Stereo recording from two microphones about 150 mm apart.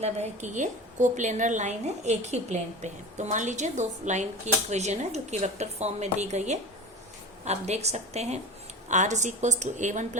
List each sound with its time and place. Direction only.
0.0 s a woman's voice: 50° right (ahead or behind)